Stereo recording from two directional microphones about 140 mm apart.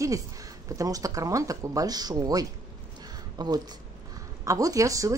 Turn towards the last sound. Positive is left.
turn(degrees=-25)  # may be behind; listen again after turning